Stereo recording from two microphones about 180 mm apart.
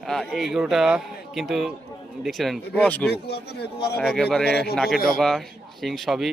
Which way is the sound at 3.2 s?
65° left (ahead or behind).